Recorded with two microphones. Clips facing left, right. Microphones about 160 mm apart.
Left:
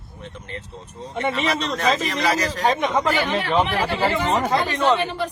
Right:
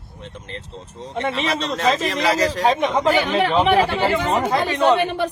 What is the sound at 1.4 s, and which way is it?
A man's voice, 30° right (ahead or behind).